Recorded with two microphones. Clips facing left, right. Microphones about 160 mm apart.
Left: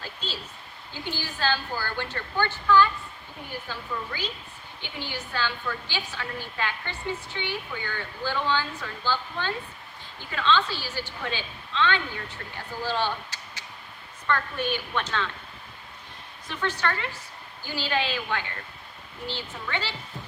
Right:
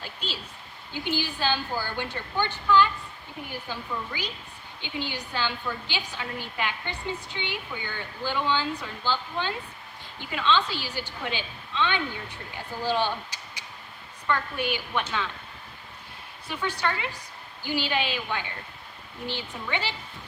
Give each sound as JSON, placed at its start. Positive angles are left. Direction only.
{"t": 0.0, "sound": "a sound", "side_deg": -15}
{"t": 1.0, "sound": "a woman's voice", "side_deg": -15}
{"t": 16.5, "sound": "a woman's voice", "side_deg": -10}